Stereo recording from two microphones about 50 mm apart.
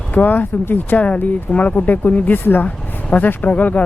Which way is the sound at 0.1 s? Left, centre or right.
Left.